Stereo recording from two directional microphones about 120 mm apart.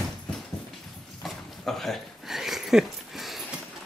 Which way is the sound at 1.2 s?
Centre (ahead or behind).